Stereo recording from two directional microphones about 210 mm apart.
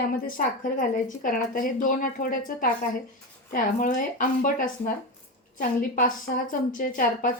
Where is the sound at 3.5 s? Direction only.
40° left (ahead or behind).